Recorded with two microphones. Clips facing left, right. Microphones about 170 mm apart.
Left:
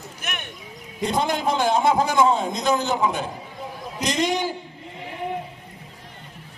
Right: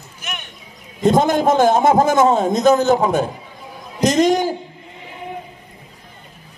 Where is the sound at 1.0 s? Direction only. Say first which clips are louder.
Right 8 dB; 45° right (ahead or behind).